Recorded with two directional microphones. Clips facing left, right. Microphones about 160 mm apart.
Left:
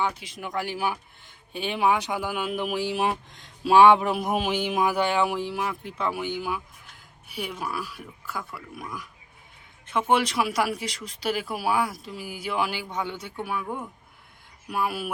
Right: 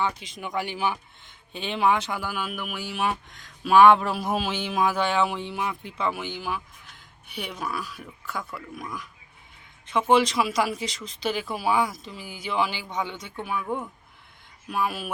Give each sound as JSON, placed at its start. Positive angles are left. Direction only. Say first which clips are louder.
{"t": 0.0, "sound": "speech", "louder": "even", "side_deg": 5}
{"t": 3.9, "sound": "speech", "louder": "left 1 dB", "side_deg": 15}
{"t": 6.1, "sound": "speech", "louder": "left 2 dB", "side_deg": 15}